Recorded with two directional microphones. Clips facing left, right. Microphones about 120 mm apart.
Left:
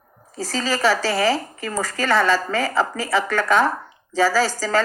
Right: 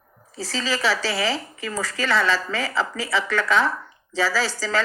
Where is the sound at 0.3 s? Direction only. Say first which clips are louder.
Left 3 dB; 45° left (ahead or behind).